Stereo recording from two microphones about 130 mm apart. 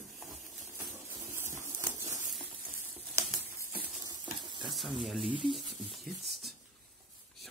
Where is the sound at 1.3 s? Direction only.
20° right (ahead or behind).